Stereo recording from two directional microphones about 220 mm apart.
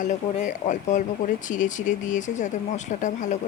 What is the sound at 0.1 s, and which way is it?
Speech, 35° left (ahead or behind).